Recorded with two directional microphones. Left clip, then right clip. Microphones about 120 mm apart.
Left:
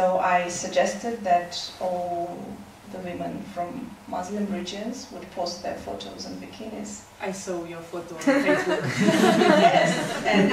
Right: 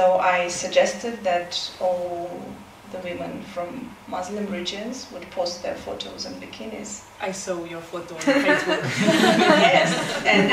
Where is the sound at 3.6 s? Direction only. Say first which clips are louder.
Right 1 dB; 35° right (ahead or behind).